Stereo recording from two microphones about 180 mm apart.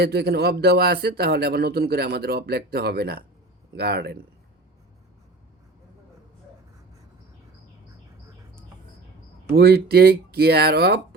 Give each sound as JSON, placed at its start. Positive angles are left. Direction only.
{"t": 0.0, "sound": "speech", "side_deg": -60}
{"t": 9.5, "sound": "speech", "side_deg": -65}